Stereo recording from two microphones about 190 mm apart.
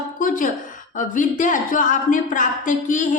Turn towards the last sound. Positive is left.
turn(degrees=40)  # may be behind; listen again after turning